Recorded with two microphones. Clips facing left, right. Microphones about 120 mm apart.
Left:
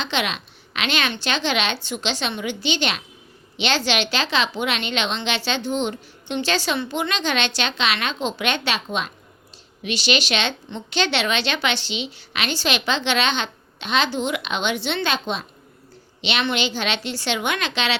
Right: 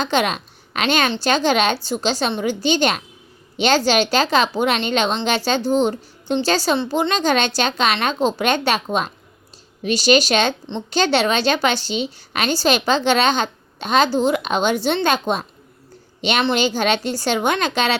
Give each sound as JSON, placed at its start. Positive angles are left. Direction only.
{"t": 0.0, "sound": "a woman's voice", "side_deg": -40}